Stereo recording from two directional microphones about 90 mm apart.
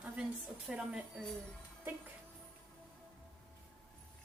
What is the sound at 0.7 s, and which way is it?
Speech, 10° right (ahead or behind).